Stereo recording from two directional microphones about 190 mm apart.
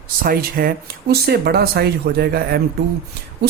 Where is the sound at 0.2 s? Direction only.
50° right (ahead or behind).